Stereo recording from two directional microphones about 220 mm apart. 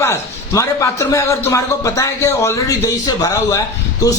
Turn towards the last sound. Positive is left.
turn(degrees=15)  # may be behind; listen again after turning